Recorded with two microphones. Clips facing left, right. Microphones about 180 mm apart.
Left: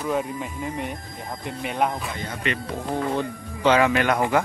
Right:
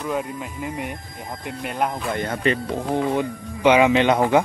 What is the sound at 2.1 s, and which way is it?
Speech, 60° right (ahead or behind).